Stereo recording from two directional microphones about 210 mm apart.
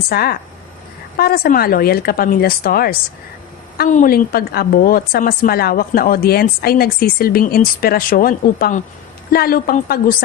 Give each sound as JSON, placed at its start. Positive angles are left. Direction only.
{"t": 0.1, "sound": "a woman's voice", "side_deg": 45}